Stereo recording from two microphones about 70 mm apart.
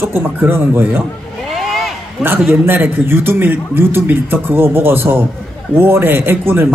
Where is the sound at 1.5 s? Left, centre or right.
Centre.